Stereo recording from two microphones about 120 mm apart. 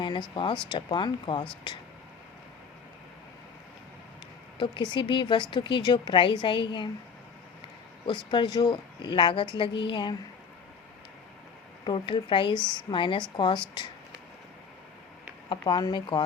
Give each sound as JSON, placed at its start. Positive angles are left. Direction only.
{"t": 0.0, "sound": "speech", "side_deg": 40}
{"t": 4.5, "sound": "speech", "side_deg": 45}
{"t": 8.3, "sound": "speech", "side_deg": 40}
{"t": 11.9, "sound": "speech", "side_deg": 45}
{"t": 15.4, "sound": "speech", "side_deg": 40}